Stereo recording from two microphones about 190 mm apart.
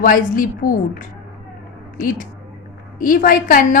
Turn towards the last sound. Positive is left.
turn(degrees=45)  # may be behind; listen again after turning